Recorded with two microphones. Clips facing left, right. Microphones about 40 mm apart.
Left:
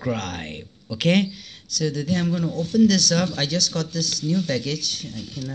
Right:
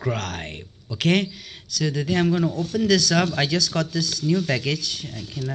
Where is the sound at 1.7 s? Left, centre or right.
Right.